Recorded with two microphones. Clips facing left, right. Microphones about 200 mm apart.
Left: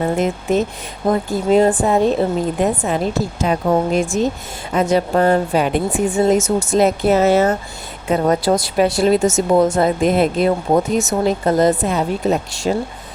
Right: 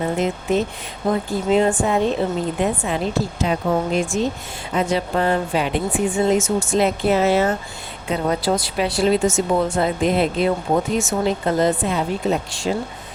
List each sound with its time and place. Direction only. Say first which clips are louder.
0.0 s a woman's voice: left 3 dB; 45° left (ahead or behind)